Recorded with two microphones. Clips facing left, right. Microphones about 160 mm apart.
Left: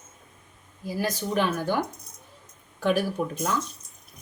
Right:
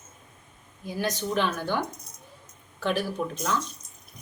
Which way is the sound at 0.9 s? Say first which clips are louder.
Left 1 dB; 5° left (ahead or behind).